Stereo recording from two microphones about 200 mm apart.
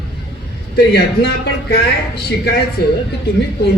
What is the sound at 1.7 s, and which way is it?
A man's voice, 55° left (ahead or behind).